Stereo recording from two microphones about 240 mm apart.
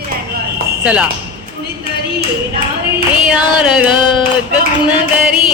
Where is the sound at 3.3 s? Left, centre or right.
Centre.